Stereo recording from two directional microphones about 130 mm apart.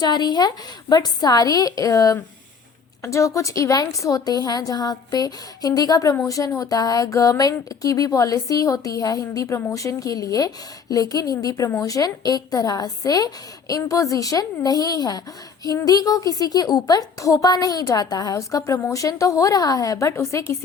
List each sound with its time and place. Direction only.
0.0 s speech: 35° left (ahead or behind)